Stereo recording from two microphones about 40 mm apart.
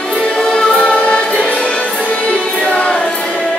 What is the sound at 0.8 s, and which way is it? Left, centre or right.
Music, left.